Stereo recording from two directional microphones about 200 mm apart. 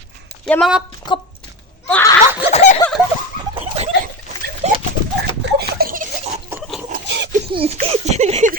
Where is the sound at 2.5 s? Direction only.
35° left (ahead or behind).